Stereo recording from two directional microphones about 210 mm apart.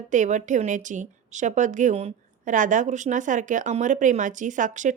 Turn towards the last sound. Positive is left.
turn(degrees=-35)  # may be behind; listen again after turning